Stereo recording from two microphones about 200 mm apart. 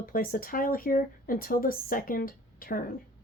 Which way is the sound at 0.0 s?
45° left (ahead or behind).